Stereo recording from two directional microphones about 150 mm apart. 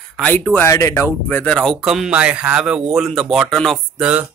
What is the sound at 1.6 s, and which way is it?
Speech, centre (ahead or behind).